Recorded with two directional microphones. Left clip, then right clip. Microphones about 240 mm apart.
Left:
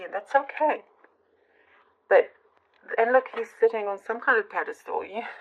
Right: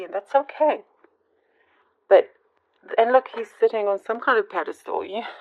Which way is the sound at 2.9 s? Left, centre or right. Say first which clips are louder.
Right 4 dB; right.